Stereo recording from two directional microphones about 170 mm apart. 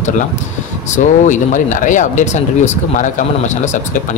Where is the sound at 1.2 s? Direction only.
50° left (ahead or behind).